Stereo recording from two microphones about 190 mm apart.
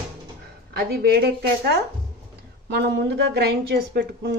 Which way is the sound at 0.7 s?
55° right (ahead or behind).